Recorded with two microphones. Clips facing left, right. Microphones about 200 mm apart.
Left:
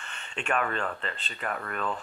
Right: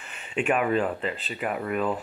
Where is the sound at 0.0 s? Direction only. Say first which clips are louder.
Right 9 dB; 5° right (ahead or behind).